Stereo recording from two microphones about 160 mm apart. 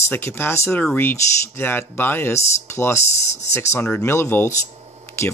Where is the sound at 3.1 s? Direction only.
45° left (ahead or behind).